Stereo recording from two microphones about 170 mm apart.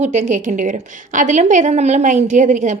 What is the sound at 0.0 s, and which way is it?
A woman's voice, 45° right (ahead or behind).